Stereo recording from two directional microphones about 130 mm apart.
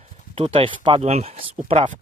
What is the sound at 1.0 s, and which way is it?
Speech, 55° right (ahead or behind).